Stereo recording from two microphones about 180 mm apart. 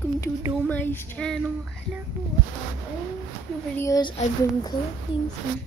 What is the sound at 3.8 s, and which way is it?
Speech, 20° left (ahead or behind).